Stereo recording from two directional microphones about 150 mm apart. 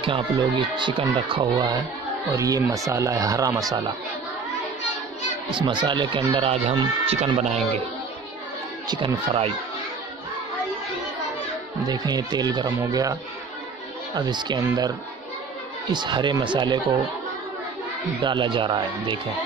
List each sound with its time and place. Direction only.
0.0 s speech: 35° right (ahead or behind)
2.2 s speech: 20° right (ahead or behind)
5.6 s speech: 30° right (ahead or behind); by 7.8 s 50° right (ahead or behind)
8.8 s speech: 30° right (ahead or behind)
11.8 s speech: 25° right (ahead or behind)
18.2 s speech: 30° right (ahead or behind)